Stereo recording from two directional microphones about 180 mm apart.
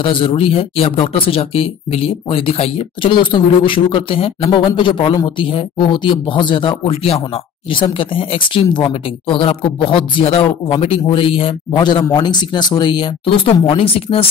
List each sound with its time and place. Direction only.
0.0 s speech: 30° left (ahead or behind)